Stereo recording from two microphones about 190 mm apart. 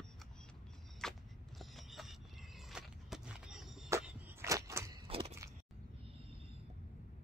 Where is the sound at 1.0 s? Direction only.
5° left (ahead or behind); by 5.0 s 15° right (ahead or behind).